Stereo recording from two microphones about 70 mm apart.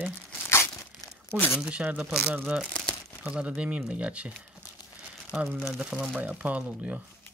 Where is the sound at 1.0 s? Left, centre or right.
Left.